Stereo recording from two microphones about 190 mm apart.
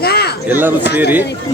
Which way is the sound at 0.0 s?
55° left (ahead or behind).